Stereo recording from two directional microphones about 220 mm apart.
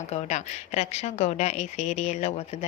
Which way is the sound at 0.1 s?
30° left (ahead or behind).